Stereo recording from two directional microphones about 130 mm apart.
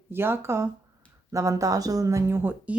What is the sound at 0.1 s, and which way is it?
Speech, 15° right (ahead or behind).